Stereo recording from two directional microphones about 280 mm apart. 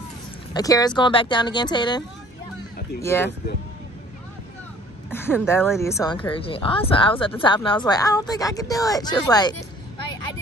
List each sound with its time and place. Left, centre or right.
0.5 s speech: centre
5.1 s speech: centre